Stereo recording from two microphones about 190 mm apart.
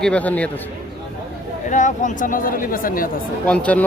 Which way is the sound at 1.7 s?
40° left (ahead or behind).